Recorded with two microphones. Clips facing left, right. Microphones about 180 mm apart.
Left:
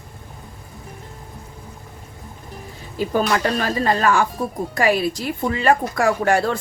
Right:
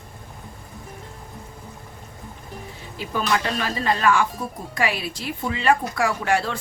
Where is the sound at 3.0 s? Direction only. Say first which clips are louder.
Left 5 dB; 40° left (ahead or behind).